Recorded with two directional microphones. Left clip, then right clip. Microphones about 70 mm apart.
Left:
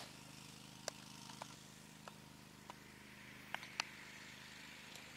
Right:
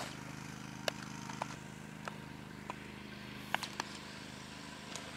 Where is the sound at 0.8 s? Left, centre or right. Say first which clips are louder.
Right 10 dB; left.